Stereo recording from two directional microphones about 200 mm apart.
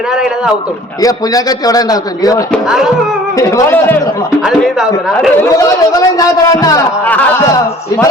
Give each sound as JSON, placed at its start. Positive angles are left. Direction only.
{"t": 1.0, "sound": "a man's voice", "side_deg": 20}
{"t": 2.5, "sound": "a woman's voice", "side_deg": -5}
{"t": 3.3, "sound": "a man's voice", "side_deg": 15}
{"t": 4.4, "sound": "a woman's voice", "side_deg": 0}
{"t": 5.4, "sound": "a man's voice", "side_deg": 15}